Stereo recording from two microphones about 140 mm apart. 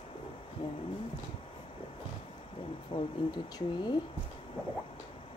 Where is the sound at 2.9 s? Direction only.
35° left (ahead or behind).